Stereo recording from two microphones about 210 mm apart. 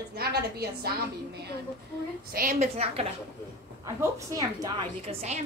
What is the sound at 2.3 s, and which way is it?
Speech, 40° right (ahead or behind).